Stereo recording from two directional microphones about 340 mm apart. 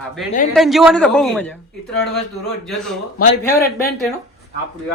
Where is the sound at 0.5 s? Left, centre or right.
Centre.